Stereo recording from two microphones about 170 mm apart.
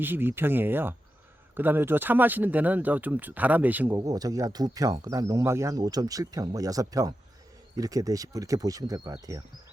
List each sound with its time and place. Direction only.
0.0 s speech: 10° right (ahead or behind)